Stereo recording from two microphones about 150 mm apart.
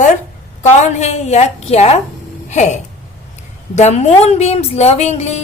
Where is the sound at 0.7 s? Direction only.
50° left (ahead or behind).